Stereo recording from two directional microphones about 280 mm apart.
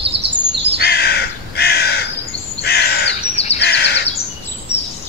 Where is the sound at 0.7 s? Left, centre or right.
Left.